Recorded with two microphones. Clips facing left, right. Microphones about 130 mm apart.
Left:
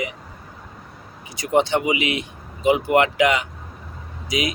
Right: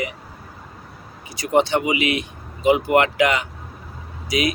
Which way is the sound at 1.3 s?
20° left (ahead or behind).